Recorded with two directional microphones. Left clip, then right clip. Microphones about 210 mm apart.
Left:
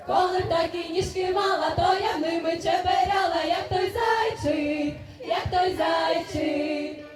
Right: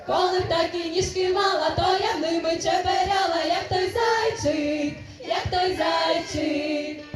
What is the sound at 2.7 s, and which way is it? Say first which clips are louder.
Speech: right 1 dB; 45° right (ahead or behind).